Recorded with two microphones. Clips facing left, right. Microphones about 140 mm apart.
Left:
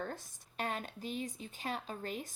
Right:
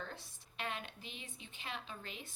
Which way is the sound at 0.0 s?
45° left (ahead or behind).